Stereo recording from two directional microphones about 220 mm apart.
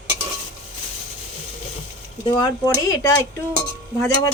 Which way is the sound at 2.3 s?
15° left (ahead or behind).